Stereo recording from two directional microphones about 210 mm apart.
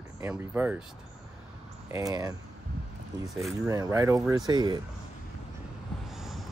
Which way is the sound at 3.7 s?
15° right (ahead or behind).